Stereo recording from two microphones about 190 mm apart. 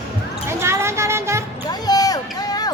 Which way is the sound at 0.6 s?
15° right (ahead or behind).